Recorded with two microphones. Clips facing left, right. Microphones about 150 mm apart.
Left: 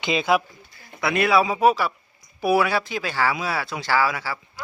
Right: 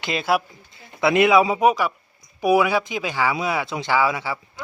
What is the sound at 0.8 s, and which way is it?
A man's voice, 20° right (ahead or behind).